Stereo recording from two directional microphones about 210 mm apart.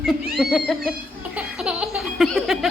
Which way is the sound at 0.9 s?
5° right (ahead or behind).